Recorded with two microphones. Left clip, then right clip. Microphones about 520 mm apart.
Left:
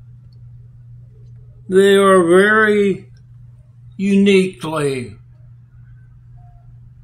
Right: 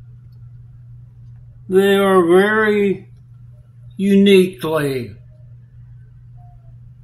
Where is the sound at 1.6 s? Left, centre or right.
Right.